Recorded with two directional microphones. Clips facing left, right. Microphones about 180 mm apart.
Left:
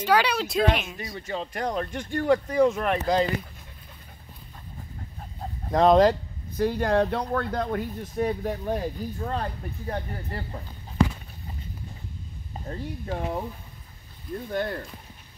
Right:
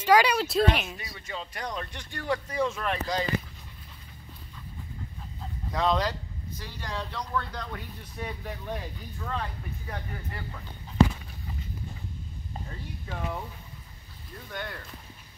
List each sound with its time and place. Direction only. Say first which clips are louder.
0.0 s speech: right 1 dB; 10° right (ahead or behind)
0.9 s speech: left 6 dB; 40° left (ahead or behind)
5.4 s speech: left 8 dB; 50° left (ahead or behind)
12.6 s speech: left 13 dB; 40° left (ahead or behind)
14.5 s speech: left 9 dB; 35° left (ahead or behind)